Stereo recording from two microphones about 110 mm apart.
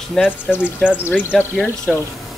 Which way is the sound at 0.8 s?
15° left (ahead or behind).